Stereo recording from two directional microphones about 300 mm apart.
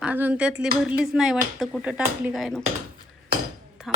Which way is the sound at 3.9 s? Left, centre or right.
Centre.